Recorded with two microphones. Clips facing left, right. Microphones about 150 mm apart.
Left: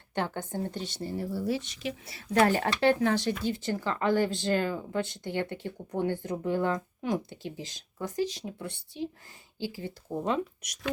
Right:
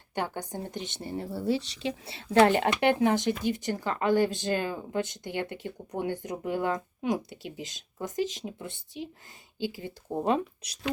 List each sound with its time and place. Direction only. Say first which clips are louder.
0.1 s speech: left 1 dB; 15° right (ahead or behind)